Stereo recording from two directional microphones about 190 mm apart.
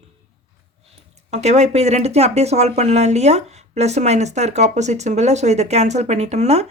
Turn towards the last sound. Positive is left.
turn(degrees=-35)  # may be behind; listen again after turning